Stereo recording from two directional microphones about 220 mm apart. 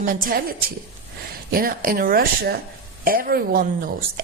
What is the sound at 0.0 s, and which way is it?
A woman's voice, 40° right (ahead or behind).